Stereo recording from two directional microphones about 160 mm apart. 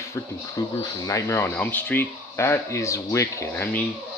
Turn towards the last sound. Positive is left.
turn(degrees=15)  # may be behind; listen again after turning